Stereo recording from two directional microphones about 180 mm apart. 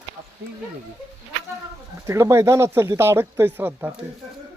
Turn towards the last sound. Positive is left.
turn(degrees=-10)  # may be behind; listen again after turning